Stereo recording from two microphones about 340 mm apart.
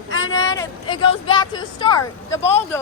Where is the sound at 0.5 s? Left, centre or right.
Centre.